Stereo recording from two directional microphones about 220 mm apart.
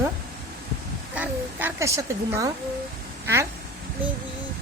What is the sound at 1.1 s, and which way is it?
A woman's voice, 10° right (ahead or behind).